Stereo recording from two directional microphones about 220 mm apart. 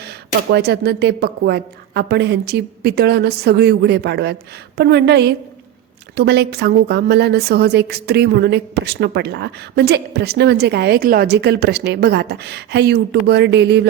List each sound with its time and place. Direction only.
0.5 s a woman's voice: 50° right (ahead or behind)